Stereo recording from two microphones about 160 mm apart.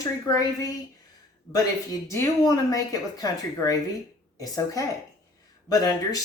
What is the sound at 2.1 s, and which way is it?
Speech, 20° left (ahead or behind).